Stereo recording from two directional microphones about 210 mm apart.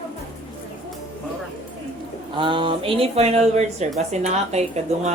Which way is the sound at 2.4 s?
25° right (ahead or behind).